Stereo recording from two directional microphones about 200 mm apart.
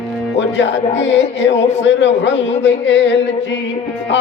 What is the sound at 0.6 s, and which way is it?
Music, 65° left (ahead or behind).